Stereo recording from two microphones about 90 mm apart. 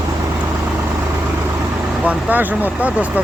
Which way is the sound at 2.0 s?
15° right (ahead or behind).